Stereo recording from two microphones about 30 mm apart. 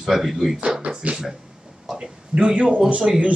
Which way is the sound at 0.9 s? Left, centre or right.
Right.